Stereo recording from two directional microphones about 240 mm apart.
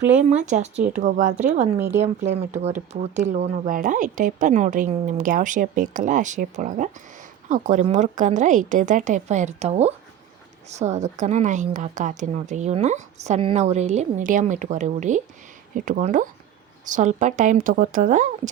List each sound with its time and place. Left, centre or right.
0.2 s a woman's voice: right